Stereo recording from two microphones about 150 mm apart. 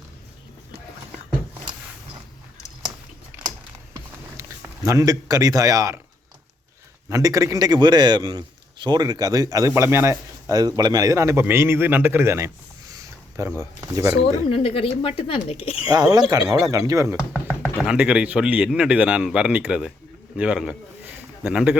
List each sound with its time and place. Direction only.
4.4 s a sound: 20° right (ahead or behind)
4.9 s a man's voice: 20° right (ahead or behind)
7.1 s a man's voice: 20° right (ahead or behind)
12.9 s a sound: 20° right (ahead or behind)
14.1 s speech: 40° left (ahead or behind)
15.9 s a man's voice: 25° right (ahead or behind)
17.2 s a man's voice: 10° right (ahead or behind)